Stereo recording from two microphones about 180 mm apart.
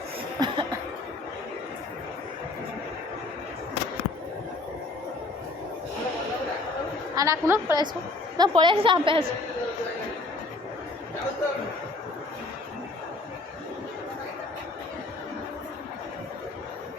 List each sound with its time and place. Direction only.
0.4 s chuckle: 25° right (ahead or behind)
7.2 s a woman's voice: 15° right (ahead or behind)
8.4 s a woman's voice: 25° right (ahead or behind)